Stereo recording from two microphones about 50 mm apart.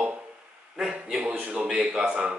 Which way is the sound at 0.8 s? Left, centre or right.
Centre.